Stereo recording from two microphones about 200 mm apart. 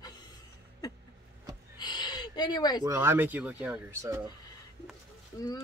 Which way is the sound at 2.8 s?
10° right (ahead or behind).